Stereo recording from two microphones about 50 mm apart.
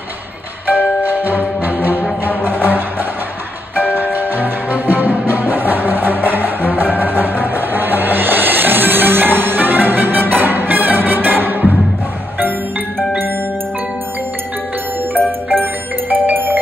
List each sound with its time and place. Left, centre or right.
0.7 s music: right
3.9 s music: right
15.5 s music: right